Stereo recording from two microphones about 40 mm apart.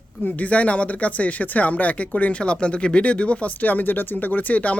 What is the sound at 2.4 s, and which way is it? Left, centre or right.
Speech, left.